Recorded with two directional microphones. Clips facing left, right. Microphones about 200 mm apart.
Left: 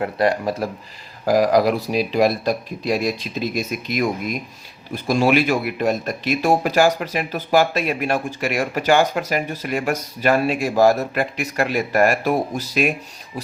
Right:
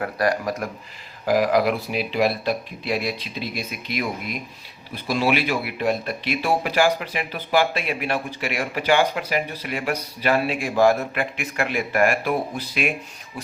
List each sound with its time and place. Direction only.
0.0 s speech: 25° left (ahead or behind)
1.2 s speech: 40° left (ahead or behind)